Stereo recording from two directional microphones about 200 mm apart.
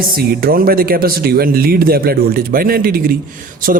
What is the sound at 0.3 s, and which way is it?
A man's voice, 50° right (ahead or behind).